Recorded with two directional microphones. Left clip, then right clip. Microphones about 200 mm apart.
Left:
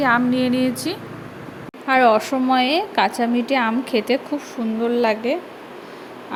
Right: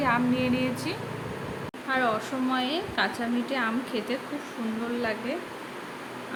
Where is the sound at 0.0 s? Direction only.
30° left (ahead or behind).